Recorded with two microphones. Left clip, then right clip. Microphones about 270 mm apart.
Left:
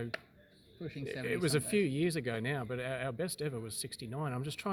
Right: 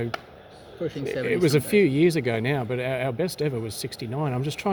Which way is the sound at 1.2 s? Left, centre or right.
Centre.